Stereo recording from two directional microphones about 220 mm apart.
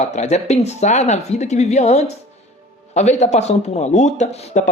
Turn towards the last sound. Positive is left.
turn(degrees=30)  # may be behind; listen again after turning